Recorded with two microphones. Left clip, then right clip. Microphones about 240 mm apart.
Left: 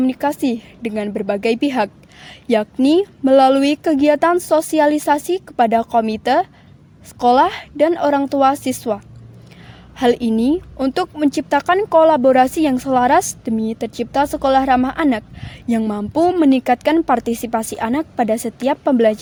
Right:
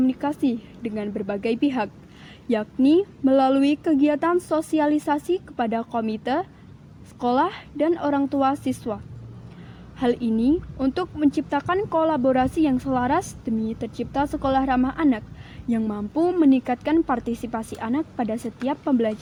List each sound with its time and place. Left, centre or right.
0.0 s speech: left
10.0 s speech: left